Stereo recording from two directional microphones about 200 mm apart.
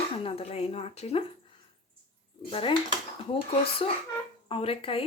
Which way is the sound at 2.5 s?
25° left (ahead or behind).